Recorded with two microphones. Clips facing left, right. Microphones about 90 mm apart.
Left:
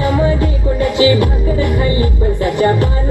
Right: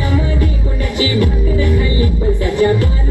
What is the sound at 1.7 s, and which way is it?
Music, 40° left (ahead or behind).